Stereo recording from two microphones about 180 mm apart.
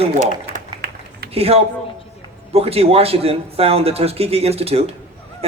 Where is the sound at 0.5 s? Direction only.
60° right (ahead or behind).